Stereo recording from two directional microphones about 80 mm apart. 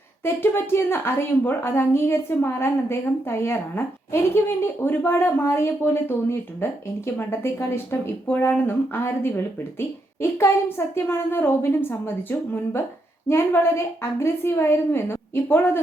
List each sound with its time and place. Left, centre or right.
0.4 s a woman's voice: left